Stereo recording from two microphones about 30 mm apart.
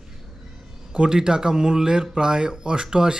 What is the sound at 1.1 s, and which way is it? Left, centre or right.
A man's voice, right.